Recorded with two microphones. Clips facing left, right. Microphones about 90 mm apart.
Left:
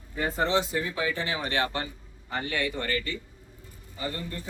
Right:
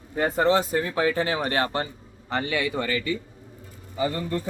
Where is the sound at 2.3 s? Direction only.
90° right.